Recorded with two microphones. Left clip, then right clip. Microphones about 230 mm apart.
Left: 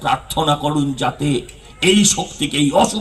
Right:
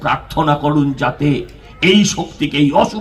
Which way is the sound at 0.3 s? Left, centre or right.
Left.